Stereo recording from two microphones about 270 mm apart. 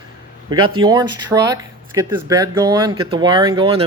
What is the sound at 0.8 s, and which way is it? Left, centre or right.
Speech, centre.